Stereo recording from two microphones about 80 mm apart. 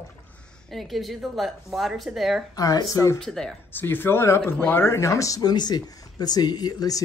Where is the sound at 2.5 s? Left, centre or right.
Left.